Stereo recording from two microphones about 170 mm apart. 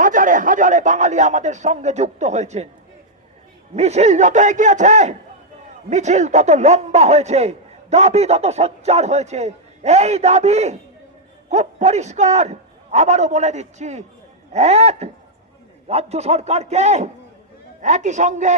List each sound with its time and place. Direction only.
0.0 s speech: 50° right (ahead or behind)
3.8 s a man's voice: 40° right (ahead or behind)